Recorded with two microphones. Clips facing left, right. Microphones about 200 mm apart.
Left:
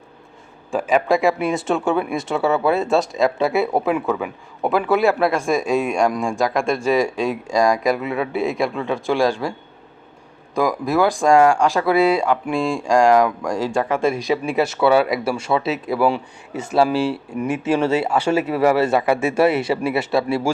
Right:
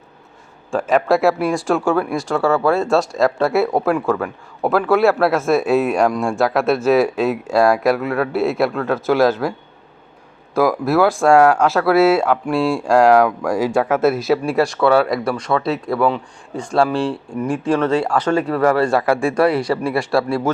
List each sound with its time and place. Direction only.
0.7 s speech: 5° left (ahead or behind)
10.5 s speech: 5° right (ahead or behind)
19.5 s speech: 25° left (ahead or behind)
19.9 s speech: centre (ahead or behind)